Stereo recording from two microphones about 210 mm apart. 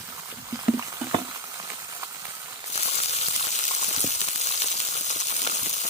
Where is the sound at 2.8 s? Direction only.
30° left (ahead or behind).